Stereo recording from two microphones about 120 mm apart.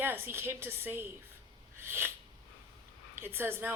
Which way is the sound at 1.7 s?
20° right (ahead or behind).